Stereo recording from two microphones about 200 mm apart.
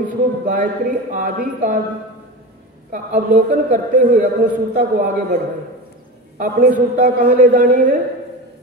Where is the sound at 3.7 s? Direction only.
45° right (ahead or behind).